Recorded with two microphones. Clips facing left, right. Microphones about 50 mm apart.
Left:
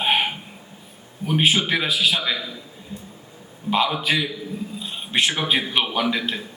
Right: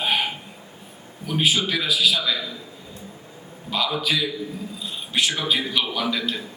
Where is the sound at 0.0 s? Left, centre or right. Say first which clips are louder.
Left 2 dB; left.